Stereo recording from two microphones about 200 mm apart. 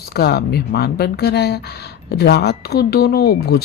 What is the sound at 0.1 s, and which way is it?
Speech, 55° left (ahead or behind).